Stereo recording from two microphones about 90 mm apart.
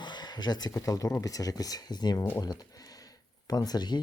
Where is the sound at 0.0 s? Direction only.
55° left (ahead or behind).